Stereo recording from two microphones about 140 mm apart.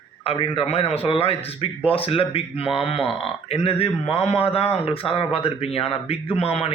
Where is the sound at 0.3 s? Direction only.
40° left (ahead or behind).